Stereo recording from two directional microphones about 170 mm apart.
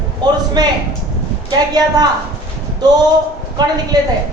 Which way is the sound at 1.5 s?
25° right (ahead or behind).